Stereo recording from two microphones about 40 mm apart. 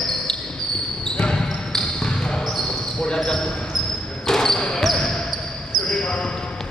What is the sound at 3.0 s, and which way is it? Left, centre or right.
Speech, left.